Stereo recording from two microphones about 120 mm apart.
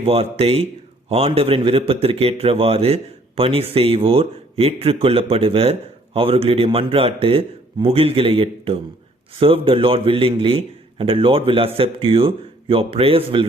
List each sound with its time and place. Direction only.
0.0 s speech: 55° right (ahead or behind)